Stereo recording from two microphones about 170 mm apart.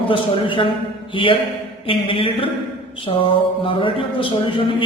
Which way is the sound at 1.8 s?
30° left (ahead or behind).